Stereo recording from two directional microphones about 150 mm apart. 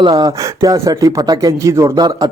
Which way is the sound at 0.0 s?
30° right (ahead or behind).